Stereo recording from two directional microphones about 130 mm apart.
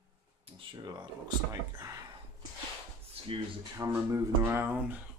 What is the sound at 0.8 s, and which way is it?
Speech, 30° right (ahead or behind).